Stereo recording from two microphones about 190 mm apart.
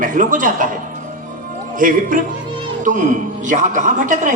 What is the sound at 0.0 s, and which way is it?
Speech, 45° right (ahead or behind).